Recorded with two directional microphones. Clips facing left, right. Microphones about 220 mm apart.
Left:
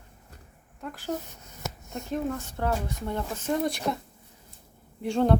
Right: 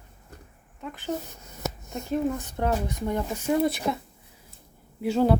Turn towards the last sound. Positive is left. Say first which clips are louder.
# right 1 dB
turn(degrees=-5)  # may be behind; listen again after turning